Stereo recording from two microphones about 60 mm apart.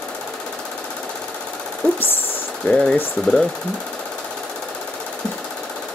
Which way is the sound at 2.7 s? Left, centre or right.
Centre.